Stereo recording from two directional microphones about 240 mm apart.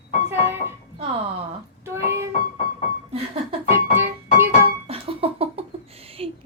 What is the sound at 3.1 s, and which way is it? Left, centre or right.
Music, right.